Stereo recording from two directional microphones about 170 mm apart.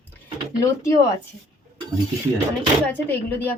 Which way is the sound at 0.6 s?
20° left (ahead or behind).